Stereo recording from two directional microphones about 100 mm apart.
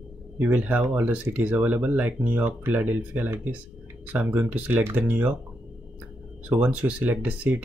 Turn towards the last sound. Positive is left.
turn(degrees=-15)  # may be behind; listen again after turning